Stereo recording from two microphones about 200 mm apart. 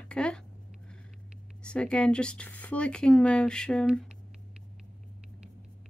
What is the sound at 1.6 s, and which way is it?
Speech, 5° left (ahead or behind).